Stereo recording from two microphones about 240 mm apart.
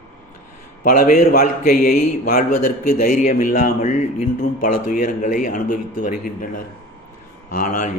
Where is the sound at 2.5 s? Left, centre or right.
Left.